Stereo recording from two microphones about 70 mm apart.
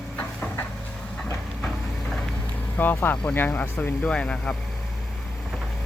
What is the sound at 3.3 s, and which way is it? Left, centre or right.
Speech, left.